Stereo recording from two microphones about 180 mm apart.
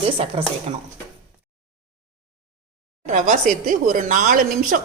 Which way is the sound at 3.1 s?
45° right (ahead or behind).